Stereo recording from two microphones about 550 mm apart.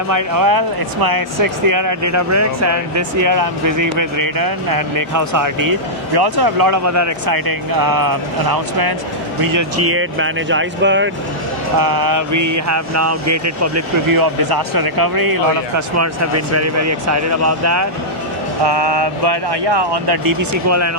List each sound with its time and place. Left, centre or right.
0.1 s speech: right
11.8 s speech: right
18.6 s speech: right